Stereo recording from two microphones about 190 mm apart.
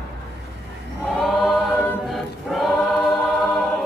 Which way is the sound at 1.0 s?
Centre (ahead or behind).